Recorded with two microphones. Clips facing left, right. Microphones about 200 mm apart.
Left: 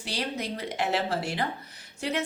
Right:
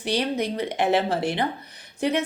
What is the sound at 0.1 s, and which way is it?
A woman's voice, 20° right (ahead or behind).